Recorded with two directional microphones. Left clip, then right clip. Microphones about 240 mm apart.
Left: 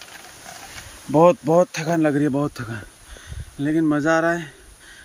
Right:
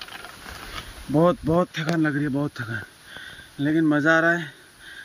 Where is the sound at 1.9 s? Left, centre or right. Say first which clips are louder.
Left 4 dB; centre.